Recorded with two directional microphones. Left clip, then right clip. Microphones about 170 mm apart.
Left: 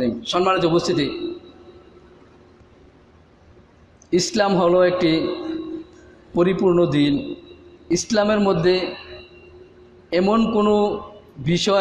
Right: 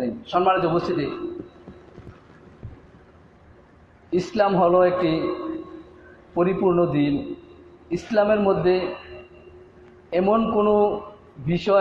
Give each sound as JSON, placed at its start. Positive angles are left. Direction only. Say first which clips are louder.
{"t": 0.0, "sound": "speech", "louder": "left 1 dB", "side_deg": 55}
{"t": 4.1, "sound": "speech", "louder": "left 2 dB", "side_deg": 55}
{"t": 6.3, "sound": "speech", "louder": "left 3 dB", "side_deg": 55}
{"t": 10.0, "sound": "speech", "louder": "left 1 dB", "side_deg": 60}